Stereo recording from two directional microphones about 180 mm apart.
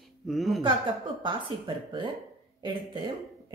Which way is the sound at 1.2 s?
25° right (ahead or behind).